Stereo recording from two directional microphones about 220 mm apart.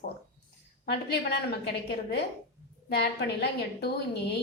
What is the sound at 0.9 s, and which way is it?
A woman's voice, 50° left (ahead or behind).